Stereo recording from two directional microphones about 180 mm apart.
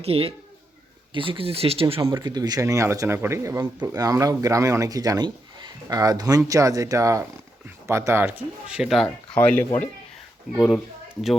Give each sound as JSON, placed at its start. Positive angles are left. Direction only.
{"t": 0.0, "sound": "speech", "side_deg": -30}